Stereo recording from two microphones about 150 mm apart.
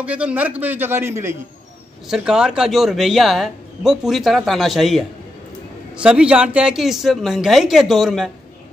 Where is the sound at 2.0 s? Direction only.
5° right (ahead or behind).